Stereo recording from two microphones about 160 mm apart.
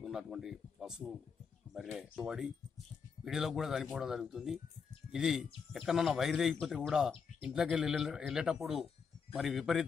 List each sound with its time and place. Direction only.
0.0 s speech: 5° right (ahead or behind)